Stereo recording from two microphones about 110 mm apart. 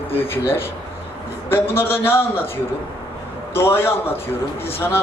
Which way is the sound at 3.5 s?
20° left (ahead or behind).